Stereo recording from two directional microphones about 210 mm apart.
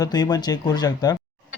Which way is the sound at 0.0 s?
20° left (ahead or behind).